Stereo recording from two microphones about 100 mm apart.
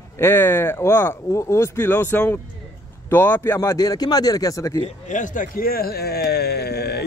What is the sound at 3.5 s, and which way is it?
Speech, 35° left (ahead or behind).